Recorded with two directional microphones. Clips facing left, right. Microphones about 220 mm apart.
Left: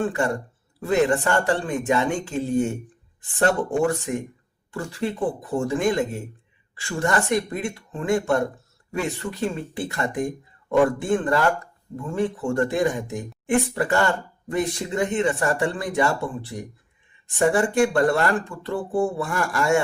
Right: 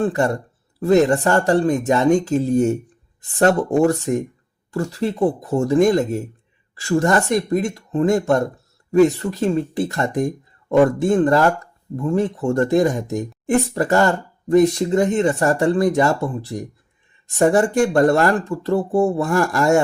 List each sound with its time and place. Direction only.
0.0 s speech: 40° right (ahead or behind)